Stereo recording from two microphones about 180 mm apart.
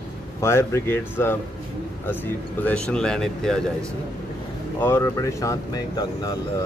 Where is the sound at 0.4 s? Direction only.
15° left (ahead or behind).